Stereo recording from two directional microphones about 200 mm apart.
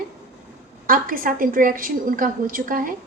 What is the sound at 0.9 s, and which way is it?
A woman's voice, 45° right (ahead or behind).